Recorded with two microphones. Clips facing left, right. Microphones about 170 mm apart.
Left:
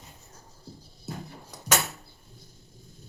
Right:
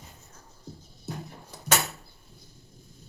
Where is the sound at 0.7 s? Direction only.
35° left (ahead or behind).